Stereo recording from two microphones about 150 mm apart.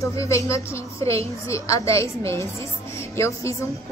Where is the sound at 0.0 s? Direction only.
20° left (ahead or behind).